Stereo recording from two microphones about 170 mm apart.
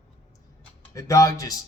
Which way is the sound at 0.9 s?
20° left (ahead or behind).